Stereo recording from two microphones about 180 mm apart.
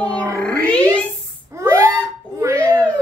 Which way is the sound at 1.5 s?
15° right (ahead or behind).